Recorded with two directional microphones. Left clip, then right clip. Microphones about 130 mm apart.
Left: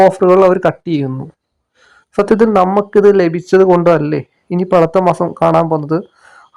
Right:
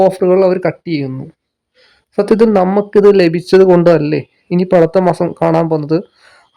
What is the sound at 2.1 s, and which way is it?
Speech, 15° right (ahead or behind).